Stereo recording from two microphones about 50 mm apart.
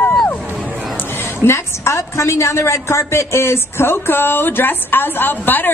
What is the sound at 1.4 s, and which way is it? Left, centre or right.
A woman's voice, left.